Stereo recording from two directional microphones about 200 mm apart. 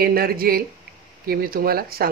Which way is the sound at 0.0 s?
50° right (ahead or behind).